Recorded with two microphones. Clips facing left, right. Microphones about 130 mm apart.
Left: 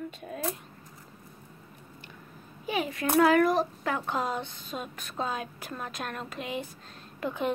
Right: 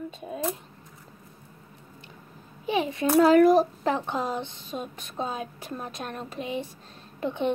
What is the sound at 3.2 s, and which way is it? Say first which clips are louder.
Speech: right 5 dB; 40° right (ahead or behind).